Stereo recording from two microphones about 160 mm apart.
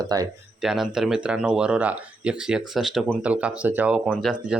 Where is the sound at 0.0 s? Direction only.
25° right (ahead or behind).